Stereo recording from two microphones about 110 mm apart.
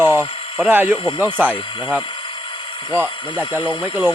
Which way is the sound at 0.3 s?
55° left (ahead or behind).